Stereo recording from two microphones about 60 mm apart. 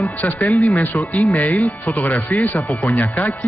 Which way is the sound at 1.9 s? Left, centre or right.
Left.